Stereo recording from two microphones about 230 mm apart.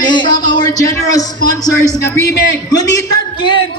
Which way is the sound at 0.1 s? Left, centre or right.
Centre.